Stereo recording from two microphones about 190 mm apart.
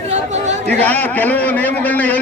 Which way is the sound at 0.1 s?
35° right (ahead or behind).